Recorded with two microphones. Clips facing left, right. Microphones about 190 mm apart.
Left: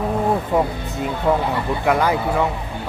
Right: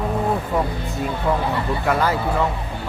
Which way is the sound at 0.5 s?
20° left (ahead or behind).